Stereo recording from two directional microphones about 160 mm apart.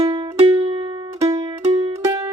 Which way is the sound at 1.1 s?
20° right (ahead or behind).